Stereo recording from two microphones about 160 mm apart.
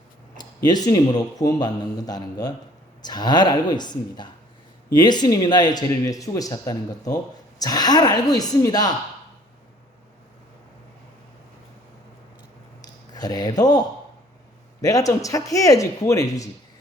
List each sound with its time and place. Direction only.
0.3 s speech: 25° left (ahead or behind)
13.1 s speech: 25° left (ahead or behind)